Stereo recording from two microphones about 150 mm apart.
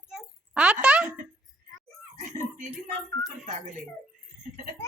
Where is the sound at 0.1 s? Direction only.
5° right (ahead or behind).